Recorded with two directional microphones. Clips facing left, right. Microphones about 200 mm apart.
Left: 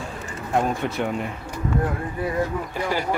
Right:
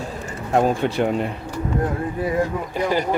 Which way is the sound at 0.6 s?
30° right (ahead or behind).